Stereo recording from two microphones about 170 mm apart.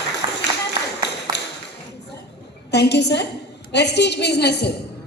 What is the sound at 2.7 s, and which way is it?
A woman's voice, 80° left.